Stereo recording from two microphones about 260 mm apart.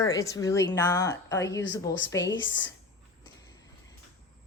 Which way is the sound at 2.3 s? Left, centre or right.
Left.